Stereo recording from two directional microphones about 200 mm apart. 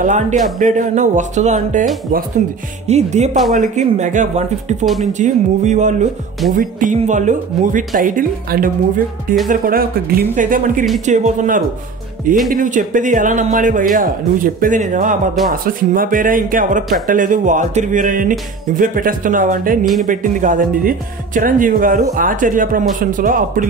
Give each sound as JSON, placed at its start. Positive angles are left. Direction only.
{"t": 0.0, "sound": "speech", "side_deg": -40}
{"t": 2.9, "sound": "speech", "side_deg": -35}